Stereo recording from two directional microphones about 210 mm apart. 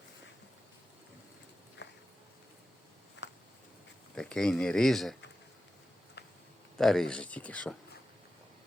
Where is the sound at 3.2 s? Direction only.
55° left (ahead or behind).